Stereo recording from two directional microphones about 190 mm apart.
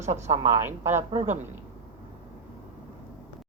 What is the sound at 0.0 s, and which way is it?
Speech, 35° right (ahead or behind).